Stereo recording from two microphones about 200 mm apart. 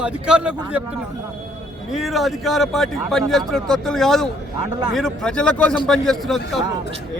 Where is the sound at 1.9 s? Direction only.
Centre (ahead or behind).